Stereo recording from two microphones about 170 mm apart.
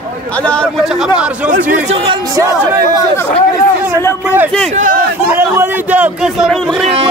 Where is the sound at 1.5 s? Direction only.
50° right (ahead or behind).